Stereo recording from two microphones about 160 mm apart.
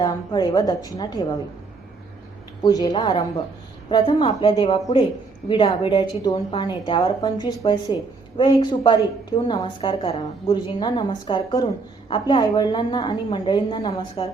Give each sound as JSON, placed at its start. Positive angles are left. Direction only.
{"t": 0.0, "sound": "a woman's voice", "side_deg": 25}
{"t": 2.6, "sound": "a woman's voice", "side_deg": 25}